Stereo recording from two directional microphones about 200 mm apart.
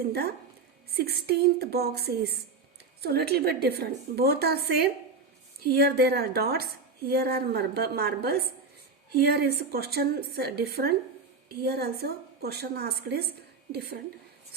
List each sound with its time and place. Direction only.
0.1 s a woman's voice: 50° right (ahead or behind)